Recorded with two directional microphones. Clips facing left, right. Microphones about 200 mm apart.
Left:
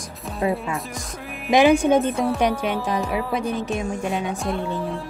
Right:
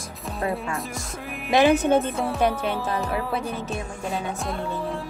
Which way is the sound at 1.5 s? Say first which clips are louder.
Left 3 dB; 15° left (ahead or behind).